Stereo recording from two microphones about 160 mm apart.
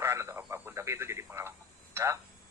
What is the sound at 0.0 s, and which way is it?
Radio, 15° right (ahead or behind).